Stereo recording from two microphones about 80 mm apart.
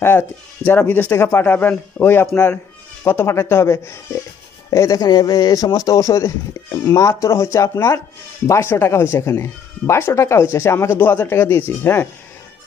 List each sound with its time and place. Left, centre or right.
0.7 s speech: left
5.0 s speech: left